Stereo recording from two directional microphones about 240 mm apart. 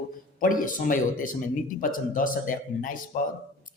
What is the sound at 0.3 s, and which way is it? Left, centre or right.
Speech, left.